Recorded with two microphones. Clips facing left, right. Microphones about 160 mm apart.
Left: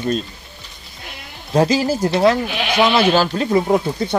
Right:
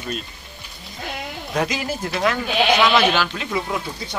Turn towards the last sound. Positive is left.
turn(degrees=45)  # may be behind; listen again after turning